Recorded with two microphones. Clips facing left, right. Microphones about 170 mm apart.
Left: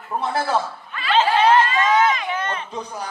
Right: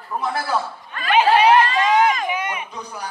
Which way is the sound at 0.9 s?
45° right (ahead or behind).